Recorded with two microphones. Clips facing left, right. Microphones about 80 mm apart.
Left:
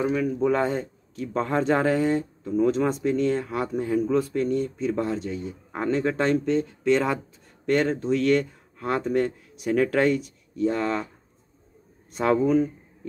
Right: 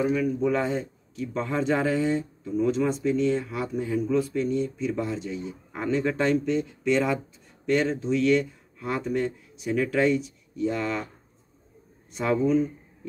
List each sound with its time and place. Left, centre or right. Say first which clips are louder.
0.0 s a man's voice: left 1 dB; left
12.1 s speech: left 2 dB; left